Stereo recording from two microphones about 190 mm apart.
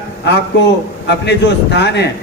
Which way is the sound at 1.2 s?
65° left (ahead or behind).